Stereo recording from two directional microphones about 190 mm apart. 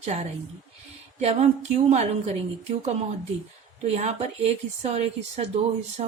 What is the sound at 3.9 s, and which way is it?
Speech, 35° right (ahead or behind).